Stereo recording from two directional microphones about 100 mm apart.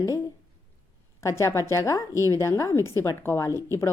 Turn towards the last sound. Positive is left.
turn(degrees=30)  # may be behind; listen again after turning